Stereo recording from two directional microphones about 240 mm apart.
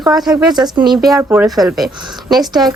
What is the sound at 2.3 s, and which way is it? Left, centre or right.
Speech, centre.